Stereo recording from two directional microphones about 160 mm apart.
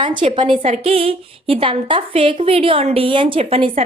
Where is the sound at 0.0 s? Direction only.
30° right (ahead or behind).